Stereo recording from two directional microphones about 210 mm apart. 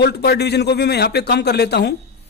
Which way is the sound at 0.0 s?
50° left (ahead or behind).